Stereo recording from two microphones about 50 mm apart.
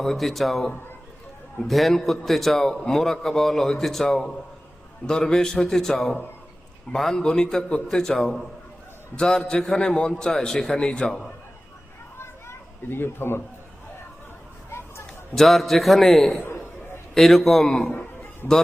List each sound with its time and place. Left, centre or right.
0.0 s a man's voice: centre
1.6 s a man's voice: centre
9.1 s a man's voice: centre
12.1 s children playing: left
15.4 s a man's voice: centre
17.8 s a sound: left